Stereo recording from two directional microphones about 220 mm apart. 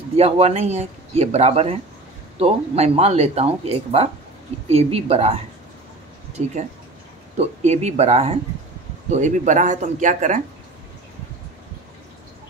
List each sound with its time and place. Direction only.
0.2 s speech: 30° right (ahead or behind)